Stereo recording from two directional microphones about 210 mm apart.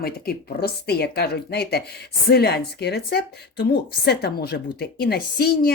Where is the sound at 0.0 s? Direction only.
45° left (ahead or behind).